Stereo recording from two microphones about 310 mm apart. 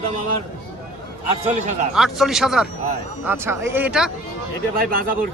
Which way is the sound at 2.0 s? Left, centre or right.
Centre.